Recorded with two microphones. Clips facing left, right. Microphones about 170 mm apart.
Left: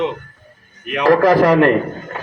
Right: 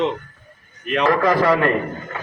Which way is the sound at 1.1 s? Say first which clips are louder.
Left 7 dB; 40° left (ahead or behind).